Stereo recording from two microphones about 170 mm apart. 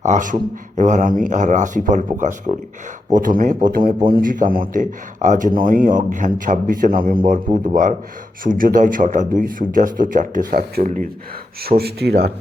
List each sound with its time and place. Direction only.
0.0 s a man's voice: 45° right (ahead or behind)
11.8 s speech: 70° right (ahead or behind)